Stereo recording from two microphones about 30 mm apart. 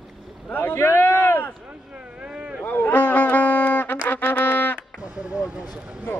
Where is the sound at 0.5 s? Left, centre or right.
Left.